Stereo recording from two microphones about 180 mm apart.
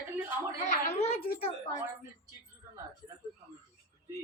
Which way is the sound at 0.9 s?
35° left (ahead or behind).